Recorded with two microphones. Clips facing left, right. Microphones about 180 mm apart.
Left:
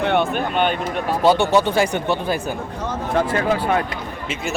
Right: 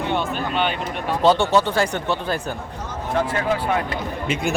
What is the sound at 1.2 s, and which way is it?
Speech, 10° left (ahead or behind).